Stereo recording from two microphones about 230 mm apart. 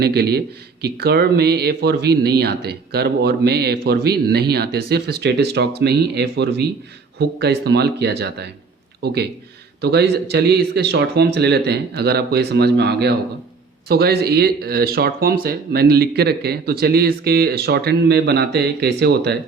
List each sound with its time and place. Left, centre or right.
0.0 s speech: right